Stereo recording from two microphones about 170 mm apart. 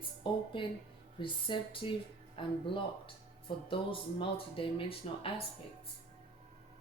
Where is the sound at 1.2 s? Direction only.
30° left (ahead or behind).